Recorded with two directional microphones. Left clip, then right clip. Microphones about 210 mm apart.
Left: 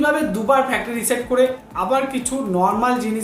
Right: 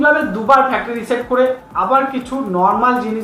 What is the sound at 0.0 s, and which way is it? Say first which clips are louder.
Speech: right 5 dB; 25° left (ahead or behind).